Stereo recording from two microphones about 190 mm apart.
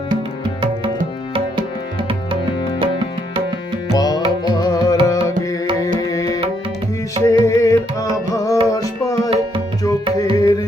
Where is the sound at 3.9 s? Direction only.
20° left (ahead or behind).